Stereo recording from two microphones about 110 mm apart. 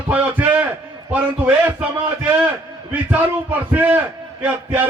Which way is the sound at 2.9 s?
15° right (ahead or behind).